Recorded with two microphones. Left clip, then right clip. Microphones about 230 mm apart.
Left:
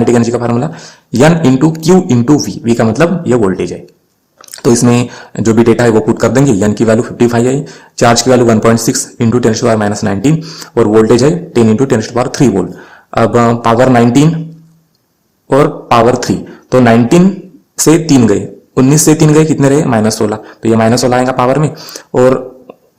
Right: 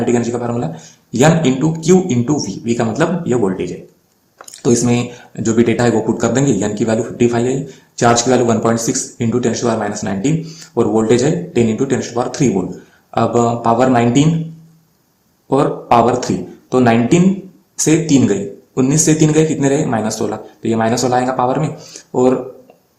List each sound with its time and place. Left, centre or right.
0.0 s speech: left
15.9 s speech: left